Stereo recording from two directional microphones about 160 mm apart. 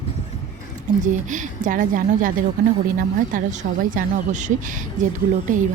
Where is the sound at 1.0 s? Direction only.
50° right (ahead or behind).